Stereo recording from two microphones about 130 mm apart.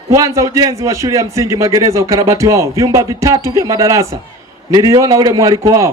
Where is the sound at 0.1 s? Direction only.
25° right (ahead or behind).